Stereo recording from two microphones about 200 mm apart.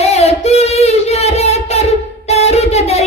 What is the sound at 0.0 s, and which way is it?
Singing, 30° left (ahead or behind).